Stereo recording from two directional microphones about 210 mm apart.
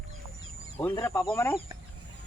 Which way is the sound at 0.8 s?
10° left (ahead or behind).